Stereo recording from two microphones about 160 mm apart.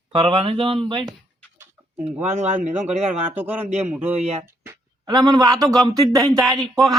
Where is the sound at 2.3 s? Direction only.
45° right (ahead or behind).